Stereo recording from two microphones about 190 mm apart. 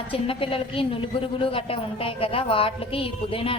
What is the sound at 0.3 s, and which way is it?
Speech, 30° left (ahead or behind).